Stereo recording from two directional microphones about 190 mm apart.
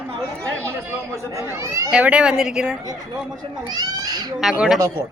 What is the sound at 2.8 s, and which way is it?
Speech, 20° right (ahead or behind).